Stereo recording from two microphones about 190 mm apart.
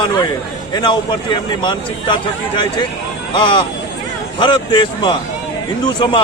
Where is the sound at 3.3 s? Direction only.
25° left (ahead or behind).